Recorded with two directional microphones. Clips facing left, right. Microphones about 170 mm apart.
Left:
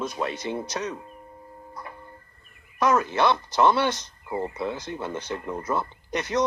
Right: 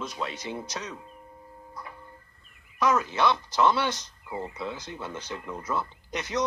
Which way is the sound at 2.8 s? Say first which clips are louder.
Left 3 dB; 55° left (ahead or behind).